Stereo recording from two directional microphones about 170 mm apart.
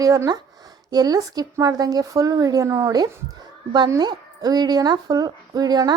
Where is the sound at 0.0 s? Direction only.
20° right (ahead or behind).